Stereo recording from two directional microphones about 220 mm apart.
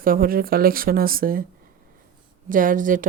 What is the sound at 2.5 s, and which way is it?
Speech, 35° right (ahead or behind).